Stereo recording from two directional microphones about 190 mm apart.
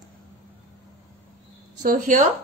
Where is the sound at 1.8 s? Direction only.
45° right (ahead or behind).